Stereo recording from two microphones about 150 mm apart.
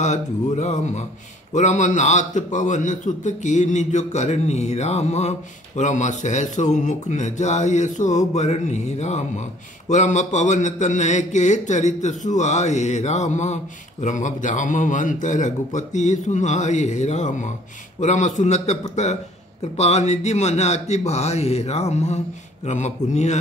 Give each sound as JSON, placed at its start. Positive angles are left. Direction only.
{"t": 0.0, "sound": "a man's voice", "side_deg": 50}